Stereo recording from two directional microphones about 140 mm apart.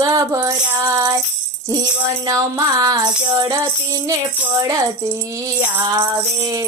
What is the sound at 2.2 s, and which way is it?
Music, 25° right (ahead or behind).